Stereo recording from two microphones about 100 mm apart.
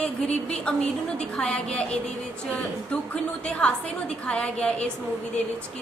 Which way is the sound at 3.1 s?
10° left (ahead or behind).